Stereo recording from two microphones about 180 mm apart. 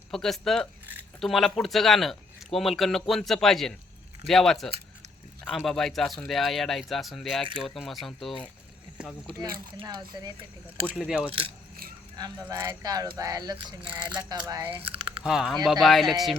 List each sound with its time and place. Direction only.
0.1 s speech: centre (ahead or behind)
9.7 s speech: 25° right (ahead or behind)
10.8 s speech: 5° right (ahead or behind)
11.3 s coin: 30° right (ahead or behind)
12.1 s speech: 20° right (ahead or behind)
13.8 s toothbrush: 5° right (ahead or behind)
14.8 s a sound: 30° right (ahead or behind)
15.2 s speech: 5° right (ahead or behind)